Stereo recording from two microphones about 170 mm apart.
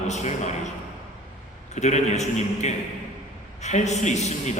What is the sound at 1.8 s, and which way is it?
A man's voice, 40° left (ahead or behind).